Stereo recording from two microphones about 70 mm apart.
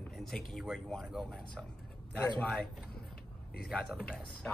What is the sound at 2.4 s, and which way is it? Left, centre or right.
Speech, centre.